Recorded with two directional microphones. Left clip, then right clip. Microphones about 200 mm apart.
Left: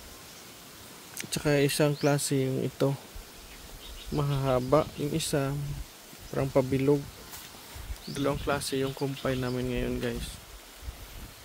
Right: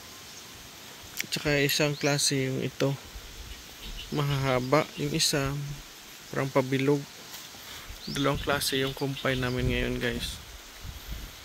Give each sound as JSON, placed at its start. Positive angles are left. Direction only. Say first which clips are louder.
{"t": 1.1, "sound": "speech", "louder": "even", "side_deg": 20}
{"t": 4.1, "sound": "speech", "louder": "even", "side_deg": 0}
{"t": 8.1, "sound": "speech", "louder": "right 2 dB", "side_deg": 0}